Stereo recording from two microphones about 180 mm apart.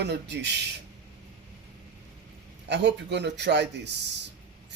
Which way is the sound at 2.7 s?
75° right (ahead or behind).